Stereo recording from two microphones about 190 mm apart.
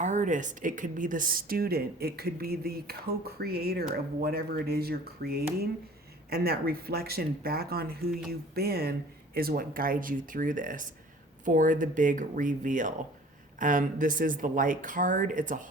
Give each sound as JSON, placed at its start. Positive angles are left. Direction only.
{"t": 0.0, "sound": "speech", "side_deg": -40}